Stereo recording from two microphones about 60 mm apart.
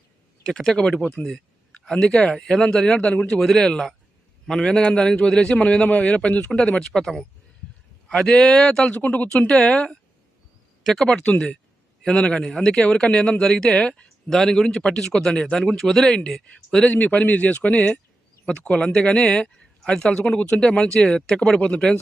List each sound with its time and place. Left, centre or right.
0.4 s a man's voice: centre
16.9 s a man's voice: left